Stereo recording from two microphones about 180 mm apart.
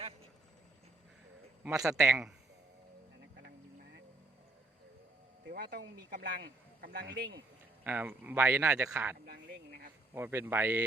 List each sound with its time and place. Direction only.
1.7 s speech: 15° right (ahead or behind)
5.5 s speech: 60° right (ahead or behind)
7.9 s speech: 10° right (ahead or behind)
9.2 s speech: 55° right (ahead or behind)
10.2 s speech: 10° right (ahead or behind)